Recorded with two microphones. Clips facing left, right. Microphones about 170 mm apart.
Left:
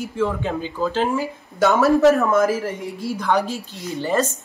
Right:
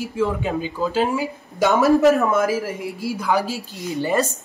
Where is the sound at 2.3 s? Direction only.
Centre (ahead or behind).